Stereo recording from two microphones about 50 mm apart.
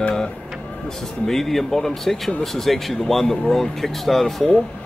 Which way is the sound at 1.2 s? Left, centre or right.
Centre.